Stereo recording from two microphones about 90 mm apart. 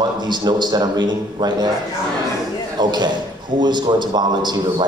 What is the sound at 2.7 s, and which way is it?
A man's voice, 55° right (ahead or behind).